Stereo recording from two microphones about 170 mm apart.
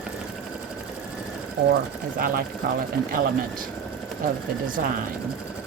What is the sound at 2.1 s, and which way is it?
Speech, 60° right (ahead or behind).